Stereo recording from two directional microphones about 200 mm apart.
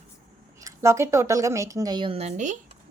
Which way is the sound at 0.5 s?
15° right (ahead or behind).